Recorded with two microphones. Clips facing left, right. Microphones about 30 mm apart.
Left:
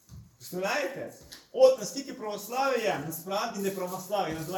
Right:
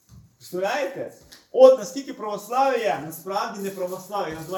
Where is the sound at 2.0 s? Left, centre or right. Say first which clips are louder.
Right 6 dB; right.